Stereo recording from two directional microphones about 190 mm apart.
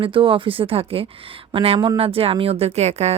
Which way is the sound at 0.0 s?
25° right (ahead or behind).